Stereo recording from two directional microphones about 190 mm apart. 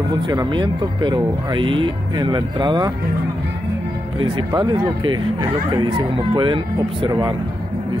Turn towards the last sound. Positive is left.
turn(degrees=-20)  # may be behind; listen again after turning